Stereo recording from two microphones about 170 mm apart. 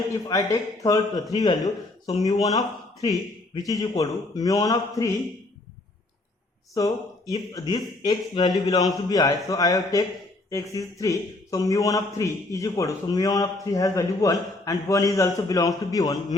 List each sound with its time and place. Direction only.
0.3 s a man's voice: 20° left (ahead or behind)
6.7 s a man's voice: 20° left (ahead or behind)